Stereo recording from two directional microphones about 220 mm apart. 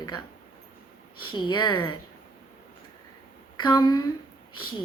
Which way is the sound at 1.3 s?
20° left (ahead or behind).